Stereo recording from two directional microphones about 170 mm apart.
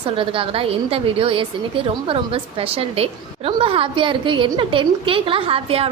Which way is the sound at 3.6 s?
30° right (ahead or behind).